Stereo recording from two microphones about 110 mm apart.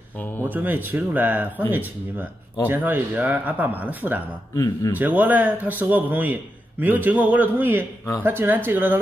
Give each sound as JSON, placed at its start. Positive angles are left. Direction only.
{"t": 0.4, "sound": "a man's voice", "side_deg": -15}
{"t": 4.6, "sound": "a man's voice", "side_deg": 35}
{"t": 4.9, "sound": "a man's voice", "side_deg": -15}